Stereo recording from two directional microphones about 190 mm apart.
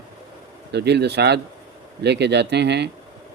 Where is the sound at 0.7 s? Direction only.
60° right (ahead or behind).